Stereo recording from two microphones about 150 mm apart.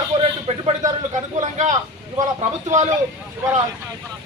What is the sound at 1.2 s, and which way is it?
Speech, 55° right (ahead or behind).